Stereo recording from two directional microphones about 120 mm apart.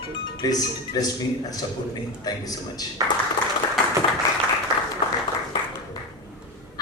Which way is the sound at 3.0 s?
30° right (ahead or behind).